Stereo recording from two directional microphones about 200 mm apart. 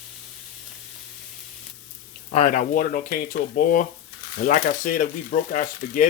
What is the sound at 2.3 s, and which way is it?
Speech, 40° left (ahead or behind).